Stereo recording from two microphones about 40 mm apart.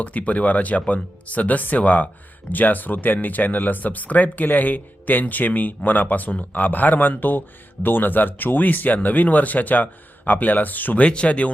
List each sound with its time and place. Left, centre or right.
0.0 s speech: left
11.0 s speech: left